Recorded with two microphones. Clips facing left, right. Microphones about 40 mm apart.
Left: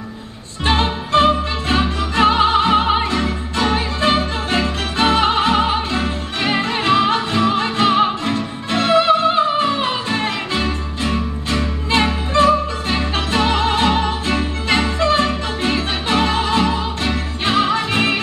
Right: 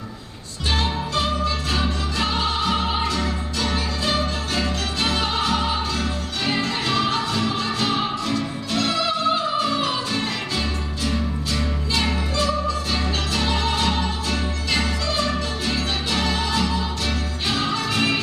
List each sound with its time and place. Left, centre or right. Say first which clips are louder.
0.7 s music: left 6 dB; left